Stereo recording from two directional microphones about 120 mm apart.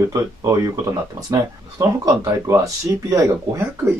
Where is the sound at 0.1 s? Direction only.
25° right (ahead or behind).